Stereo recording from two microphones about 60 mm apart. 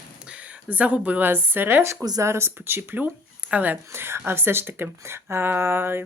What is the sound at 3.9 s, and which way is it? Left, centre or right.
Speech, right.